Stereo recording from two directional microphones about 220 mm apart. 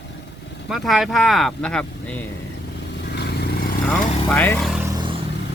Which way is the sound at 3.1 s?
45° left (ahead or behind).